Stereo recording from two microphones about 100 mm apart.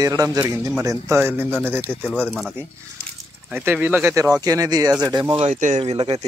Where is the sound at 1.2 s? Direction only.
20° right (ahead or behind).